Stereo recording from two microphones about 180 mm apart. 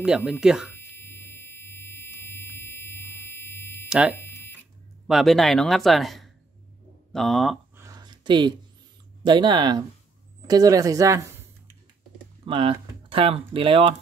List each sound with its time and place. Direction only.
0.0 s speech: 5° right (ahead or behind)
0.7 s buzzer: 10° left (ahead or behind)
5.0 s speech: centre (ahead or behind)
7.7 s a sound: 20° right (ahead or behind)
9.2 s speech: 25° right (ahead or behind)
12.4 s speech: 30° right (ahead or behind)